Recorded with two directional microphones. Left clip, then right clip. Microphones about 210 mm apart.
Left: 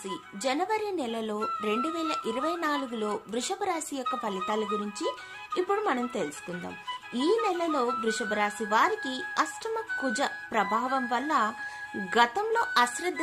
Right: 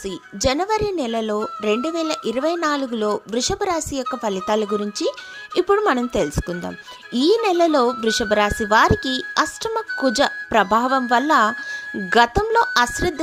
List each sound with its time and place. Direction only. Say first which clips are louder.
0.4 s speech: right 9 dB; 35° right (ahead or behind)